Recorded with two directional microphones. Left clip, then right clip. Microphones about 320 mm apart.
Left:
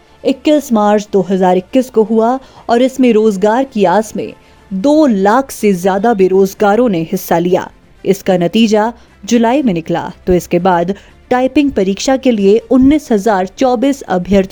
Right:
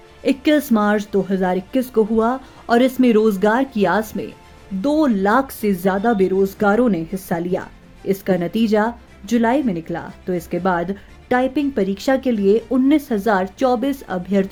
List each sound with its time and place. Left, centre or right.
0.2 s speech: centre